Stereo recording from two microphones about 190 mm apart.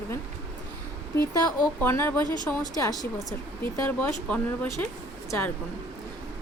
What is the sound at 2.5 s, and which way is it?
Speech, 20° left (ahead or behind).